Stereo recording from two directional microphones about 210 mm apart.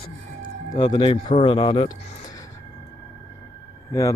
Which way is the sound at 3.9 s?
15° left (ahead or behind).